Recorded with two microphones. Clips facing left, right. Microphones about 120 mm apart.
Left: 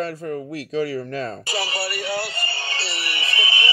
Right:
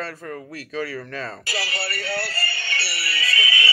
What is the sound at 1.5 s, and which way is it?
Speech, 25° left (ahead or behind).